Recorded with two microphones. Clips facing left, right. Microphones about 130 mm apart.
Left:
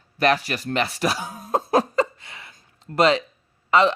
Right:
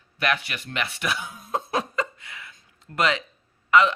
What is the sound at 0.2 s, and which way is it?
Chuckle, 40° left (ahead or behind).